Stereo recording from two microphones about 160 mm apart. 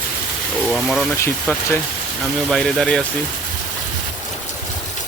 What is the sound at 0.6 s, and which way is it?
Speech, centre (ahead or behind).